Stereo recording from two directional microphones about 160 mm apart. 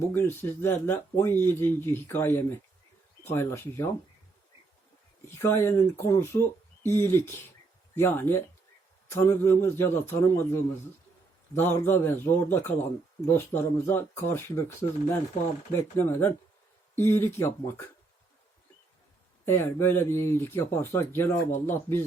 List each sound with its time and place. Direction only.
0.1 s speech: 15° left (ahead or behind)
5.3 s speech: 15° left (ahead or behind)
19.5 s speech: 15° left (ahead or behind)